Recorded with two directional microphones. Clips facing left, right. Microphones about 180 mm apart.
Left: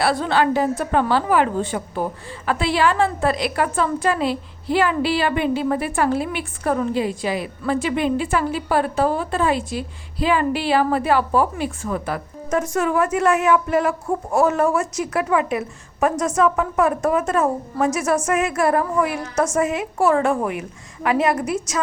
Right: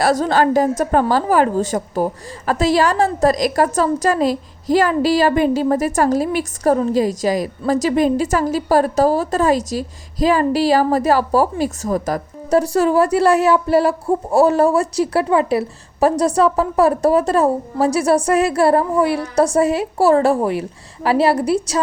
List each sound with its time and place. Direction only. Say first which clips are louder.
0.0 s a woman's voice: right 4 dB; 40° right (ahead or behind)